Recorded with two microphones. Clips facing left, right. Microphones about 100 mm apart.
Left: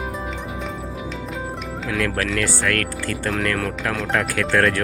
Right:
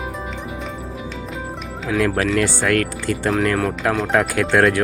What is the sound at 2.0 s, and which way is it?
Speech, 15° right (ahead or behind).